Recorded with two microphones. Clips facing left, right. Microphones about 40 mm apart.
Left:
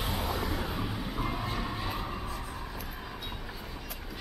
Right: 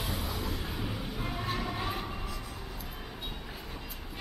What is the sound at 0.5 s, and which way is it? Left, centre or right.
Vehicle, left.